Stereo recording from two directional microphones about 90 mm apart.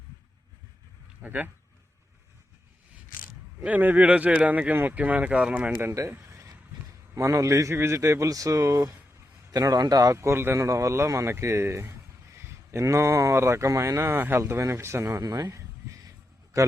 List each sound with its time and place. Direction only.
1.2 s speech: 15° right (ahead or behind)
3.6 s speech: 20° right (ahead or behind)
5.8 s speech: 30° right (ahead or behind)
15.2 s speech: 45° right (ahead or behind)
15.4 s a sound: 35° right (ahead or behind)